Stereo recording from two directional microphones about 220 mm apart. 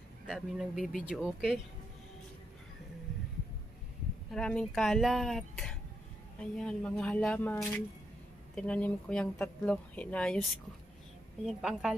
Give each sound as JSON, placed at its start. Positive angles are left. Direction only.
{"t": 0.3, "sound": "speech", "side_deg": 0}
{"t": 4.3, "sound": "speech", "side_deg": 5}